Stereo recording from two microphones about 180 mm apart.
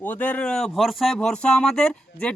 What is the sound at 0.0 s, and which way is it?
Speech, 10° left (ahead or behind).